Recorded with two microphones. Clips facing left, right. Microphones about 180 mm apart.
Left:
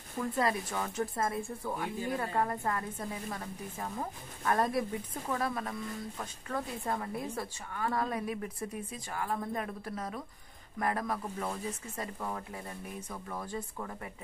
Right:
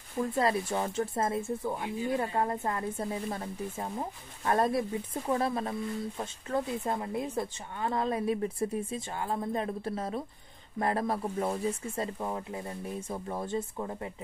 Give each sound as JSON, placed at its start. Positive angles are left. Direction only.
{"t": 0.4, "sound": "speech", "side_deg": -30}